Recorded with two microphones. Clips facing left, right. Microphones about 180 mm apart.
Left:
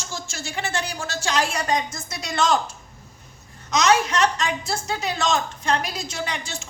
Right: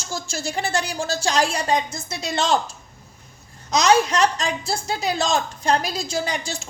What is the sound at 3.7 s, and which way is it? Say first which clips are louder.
A woman's voice: right 2 dB; 35° right (ahead or behind).